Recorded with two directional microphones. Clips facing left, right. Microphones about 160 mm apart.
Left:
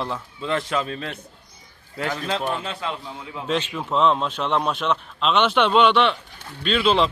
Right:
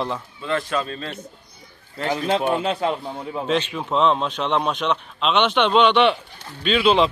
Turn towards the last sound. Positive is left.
turn(degrees=0)  # may be behind; listen again after turning